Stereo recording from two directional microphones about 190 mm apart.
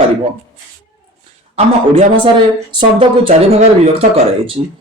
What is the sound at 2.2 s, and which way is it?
Speech, 25° right (ahead or behind).